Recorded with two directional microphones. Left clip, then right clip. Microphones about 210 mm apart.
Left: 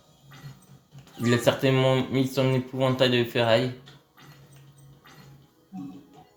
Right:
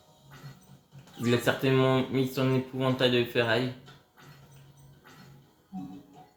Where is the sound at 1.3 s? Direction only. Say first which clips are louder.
Left 4 dB; 45° left (ahead or behind).